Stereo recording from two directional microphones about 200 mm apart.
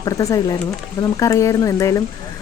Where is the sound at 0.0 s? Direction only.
15° left (ahead or behind).